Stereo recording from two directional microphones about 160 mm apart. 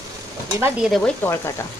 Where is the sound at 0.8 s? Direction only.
Centre (ahead or behind).